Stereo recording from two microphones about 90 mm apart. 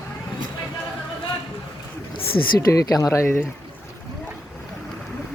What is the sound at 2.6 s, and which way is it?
Speech, 40° left (ahead or behind).